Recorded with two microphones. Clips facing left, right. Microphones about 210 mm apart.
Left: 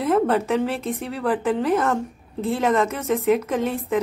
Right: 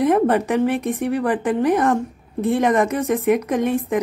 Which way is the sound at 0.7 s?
15° right (ahead or behind).